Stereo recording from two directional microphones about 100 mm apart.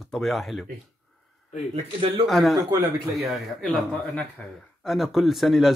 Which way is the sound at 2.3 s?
Centre (ahead or behind).